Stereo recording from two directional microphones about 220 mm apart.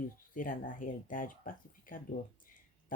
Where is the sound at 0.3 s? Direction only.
35° left (ahead or behind).